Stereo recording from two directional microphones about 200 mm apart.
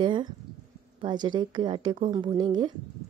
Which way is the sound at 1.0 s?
20° right (ahead or behind).